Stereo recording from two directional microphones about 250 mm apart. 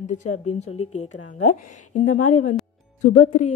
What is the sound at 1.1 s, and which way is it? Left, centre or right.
Speech, left.